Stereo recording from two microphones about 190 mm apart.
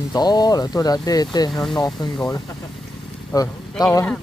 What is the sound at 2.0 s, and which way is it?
Speech, 20° left (ahead or behind).